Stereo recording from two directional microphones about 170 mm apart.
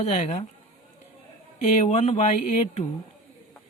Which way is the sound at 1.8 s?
40° left (ahead or behind).